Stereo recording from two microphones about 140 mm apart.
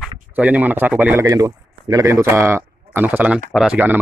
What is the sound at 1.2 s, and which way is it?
Speech, 25° right (ahead or behind).